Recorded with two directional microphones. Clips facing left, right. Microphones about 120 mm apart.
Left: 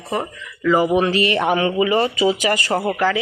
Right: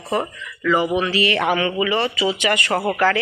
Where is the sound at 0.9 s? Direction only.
45° left (ahead or behind).